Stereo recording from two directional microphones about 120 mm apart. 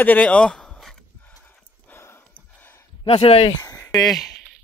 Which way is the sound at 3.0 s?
65° left (ahead or behind).